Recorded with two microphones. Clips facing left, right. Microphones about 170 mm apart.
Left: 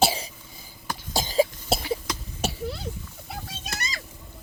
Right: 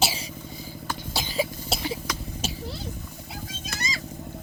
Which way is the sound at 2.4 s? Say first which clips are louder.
Left 5 dB; 65° left (ahead or behind).